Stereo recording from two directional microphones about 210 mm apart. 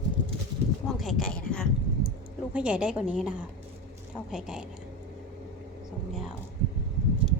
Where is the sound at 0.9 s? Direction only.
Centre (ahead or behind).